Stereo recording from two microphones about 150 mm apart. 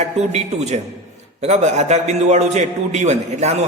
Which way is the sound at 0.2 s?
45° right (ahead or behind).